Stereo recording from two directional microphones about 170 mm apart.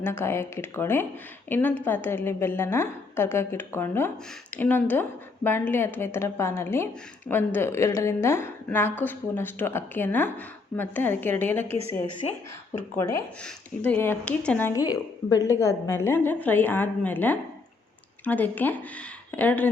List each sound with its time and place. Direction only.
0.0 s a woman's voice: 15° left (ahead or behind)
13.0 s a woman's voice: 15° left (ahead or behind)